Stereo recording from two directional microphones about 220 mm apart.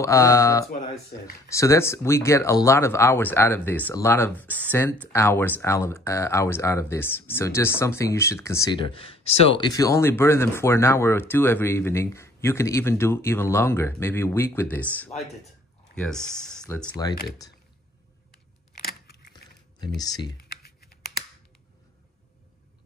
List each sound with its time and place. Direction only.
0.0 s speech: 15° left (ahead or behind)
20.0 s speech: 15° left (ahead or behind)